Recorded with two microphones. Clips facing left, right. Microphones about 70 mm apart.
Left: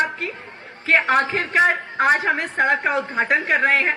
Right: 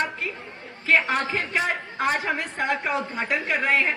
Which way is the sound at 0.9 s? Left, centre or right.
Left.